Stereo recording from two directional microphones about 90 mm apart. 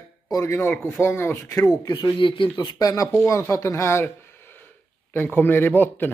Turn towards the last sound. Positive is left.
turn(degrees=20)  # may be behind; listen again after turning